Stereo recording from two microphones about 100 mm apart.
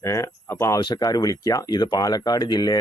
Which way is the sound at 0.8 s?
40° left (ahead or behind).